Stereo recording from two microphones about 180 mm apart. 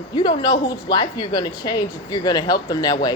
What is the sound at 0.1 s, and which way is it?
Speech, 25° left (ahead or behind).